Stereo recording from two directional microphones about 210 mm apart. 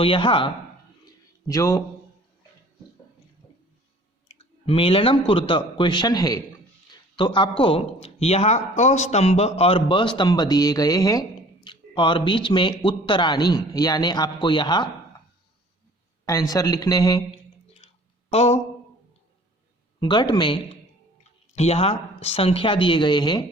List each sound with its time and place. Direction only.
0.0 s speech: 25° left (ahead or behind)
4.3 s a man's voice: 25° left (ahead or behind)
16.2 s speech: 15° left (ahead or behind)
17.8 s a sound: 30° left (ahead or behind)
18.3 s speech: 30° left (ahead or behind)
20.0 s speech: 20° left (ahead or behind)